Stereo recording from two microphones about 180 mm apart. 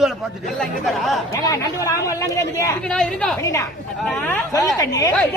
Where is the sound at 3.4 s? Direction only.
15° left (ahead or behind).